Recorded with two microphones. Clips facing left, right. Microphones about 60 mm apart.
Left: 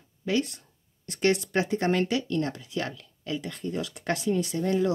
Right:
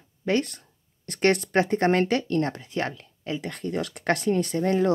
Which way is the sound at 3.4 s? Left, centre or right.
Right.